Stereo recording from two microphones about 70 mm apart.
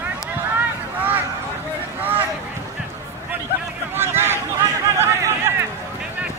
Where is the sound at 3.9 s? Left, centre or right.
Right.